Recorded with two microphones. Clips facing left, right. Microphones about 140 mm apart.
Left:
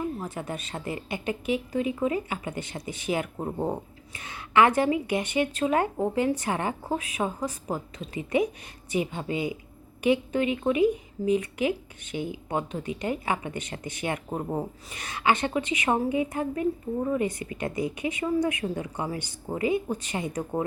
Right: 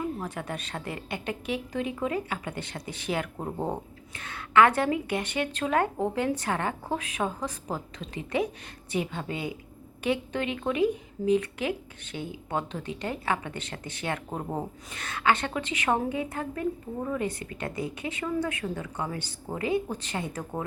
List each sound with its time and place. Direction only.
0.2 s a woman's voice: 10° left (ahead or behind)